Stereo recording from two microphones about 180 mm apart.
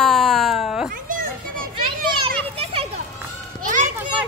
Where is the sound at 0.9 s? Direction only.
50° right (ahead or behind).